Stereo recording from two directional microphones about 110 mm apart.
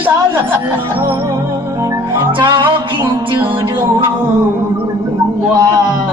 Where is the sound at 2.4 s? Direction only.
45° right (ahead or behind).